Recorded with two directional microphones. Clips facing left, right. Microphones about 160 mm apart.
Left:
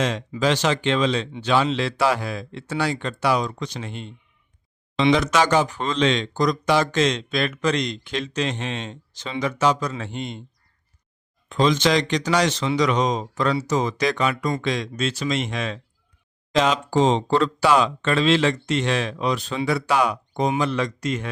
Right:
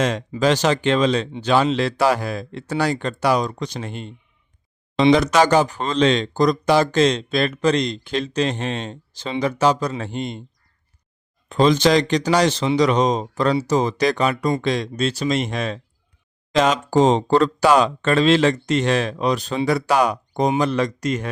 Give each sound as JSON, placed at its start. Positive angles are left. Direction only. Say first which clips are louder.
{"t": 0.0, "sound": "speech", "louder": "right 3 dB", "side_deg": -45}
{"t": 11.4, "sound": "speech", "louder": "right 4 dB", "side_deg": -40}